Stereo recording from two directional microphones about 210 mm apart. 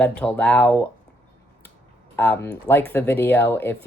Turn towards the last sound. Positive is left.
turn(degrees=10)  # may be behind; listen again after turning